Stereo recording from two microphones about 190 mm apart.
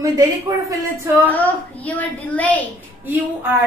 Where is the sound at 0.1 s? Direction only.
20° right (ahead or behind).